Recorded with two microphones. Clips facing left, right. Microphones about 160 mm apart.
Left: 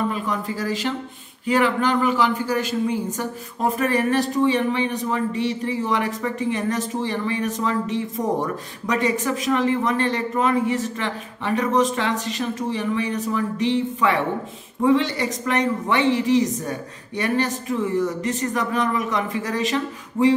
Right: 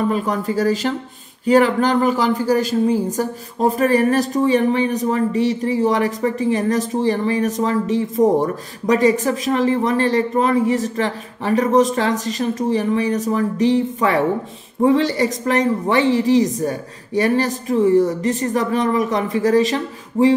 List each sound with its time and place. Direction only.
0.1 s speech: 40° right (ahead or behind)